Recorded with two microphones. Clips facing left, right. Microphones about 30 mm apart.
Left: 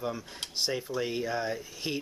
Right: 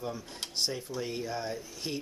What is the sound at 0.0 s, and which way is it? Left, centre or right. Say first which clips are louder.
Speech: left 3 dB; centre.